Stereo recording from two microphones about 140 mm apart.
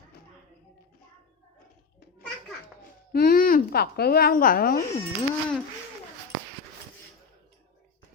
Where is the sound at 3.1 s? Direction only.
90° left.